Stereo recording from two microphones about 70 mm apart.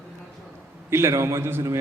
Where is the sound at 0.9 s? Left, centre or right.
Right.